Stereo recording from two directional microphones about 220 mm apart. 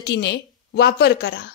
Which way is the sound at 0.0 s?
50° left (ahead or behind).